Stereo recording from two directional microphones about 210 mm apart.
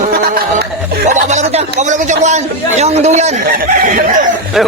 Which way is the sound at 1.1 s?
35° right (ahead or behind).